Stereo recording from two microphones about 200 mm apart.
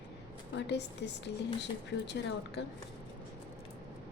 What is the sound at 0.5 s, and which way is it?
Speech, 60° left (ahead or behind).